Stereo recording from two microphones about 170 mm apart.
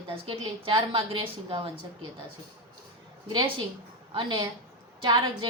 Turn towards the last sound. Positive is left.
turn(degrees=-30)  # may be behind; listen again after turning